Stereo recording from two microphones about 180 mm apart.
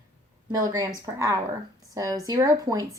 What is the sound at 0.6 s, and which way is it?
Speech, 20° right (ahead or behind).